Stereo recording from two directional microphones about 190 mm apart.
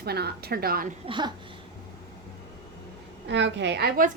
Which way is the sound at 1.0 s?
25° right (ahead or behind).